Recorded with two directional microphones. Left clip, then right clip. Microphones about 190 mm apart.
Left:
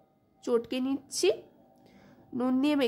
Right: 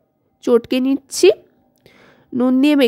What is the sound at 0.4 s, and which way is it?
Speech, 45° right (ahead or behind).